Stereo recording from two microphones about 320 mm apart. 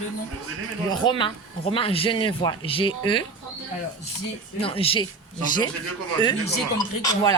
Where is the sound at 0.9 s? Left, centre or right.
Centre.